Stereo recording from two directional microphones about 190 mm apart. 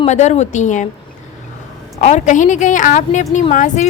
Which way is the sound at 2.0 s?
40° left (ahead or behind).